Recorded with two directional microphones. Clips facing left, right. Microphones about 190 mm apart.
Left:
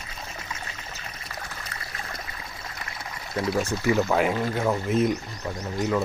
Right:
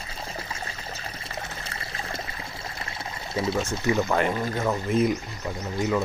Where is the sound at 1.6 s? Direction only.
25° right (ahead or behind).